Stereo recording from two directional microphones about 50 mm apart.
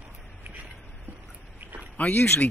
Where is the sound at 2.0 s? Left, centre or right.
Left.